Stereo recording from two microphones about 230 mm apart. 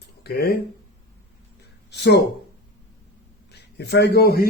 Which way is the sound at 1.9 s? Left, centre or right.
Left.